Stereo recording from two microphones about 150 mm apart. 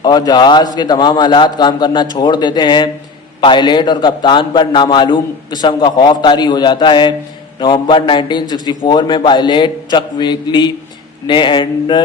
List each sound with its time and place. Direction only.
0.0 s a man's voice: 25° left (ahead or behind)